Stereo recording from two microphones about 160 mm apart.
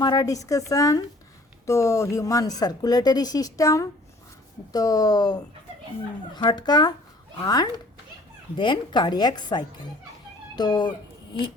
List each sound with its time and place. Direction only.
0.0 s speech: 25° left (ahead or behind)